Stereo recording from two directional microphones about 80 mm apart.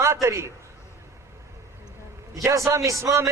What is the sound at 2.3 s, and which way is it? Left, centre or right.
Speech, right.